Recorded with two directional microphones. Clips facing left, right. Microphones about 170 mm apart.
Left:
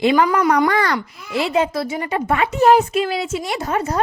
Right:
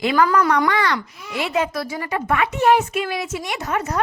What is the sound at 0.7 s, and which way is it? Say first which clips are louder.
Speech: left 2 dB; 40° left (ahead or behind).